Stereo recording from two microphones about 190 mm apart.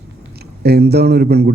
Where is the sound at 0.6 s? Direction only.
55° right (ahead or behind).